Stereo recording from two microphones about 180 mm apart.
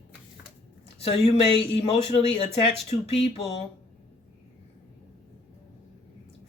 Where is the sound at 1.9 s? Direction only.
35° left (ahead or behind).